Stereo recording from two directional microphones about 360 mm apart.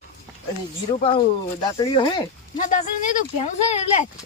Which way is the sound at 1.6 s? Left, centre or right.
Centre.